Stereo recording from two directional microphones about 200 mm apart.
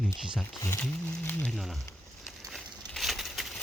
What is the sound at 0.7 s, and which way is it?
Speech, 5° left (ahead or behind).